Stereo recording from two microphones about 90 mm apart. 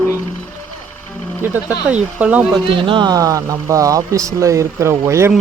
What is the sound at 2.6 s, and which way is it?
Speech, 65° right (ahead or behind).